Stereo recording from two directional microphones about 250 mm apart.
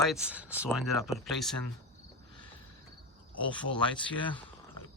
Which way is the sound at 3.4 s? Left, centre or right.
Centre.